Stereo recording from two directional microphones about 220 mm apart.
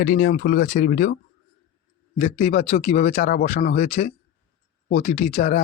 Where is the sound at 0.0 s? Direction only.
40° left (ahead or behind).